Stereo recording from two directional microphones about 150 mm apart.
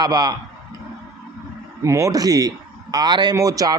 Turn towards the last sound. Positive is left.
turn(degrees=-25)  # may be behind; listen again after turning